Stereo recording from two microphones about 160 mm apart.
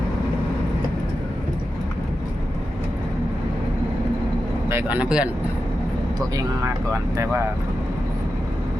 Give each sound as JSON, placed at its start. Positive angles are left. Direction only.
{"t": 4.7, "sound": "speech", "side_deg": -15}
{"t": 6.1, "sound": "speech", "side_deg": -20}